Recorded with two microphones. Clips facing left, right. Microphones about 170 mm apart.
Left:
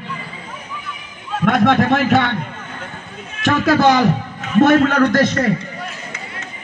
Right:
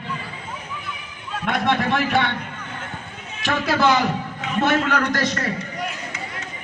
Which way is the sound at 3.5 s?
45° left (ahead or behind).